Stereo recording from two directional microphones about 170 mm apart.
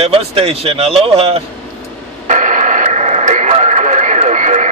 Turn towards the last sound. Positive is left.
turn(degrees=-45)  # may be behind; listen again after turning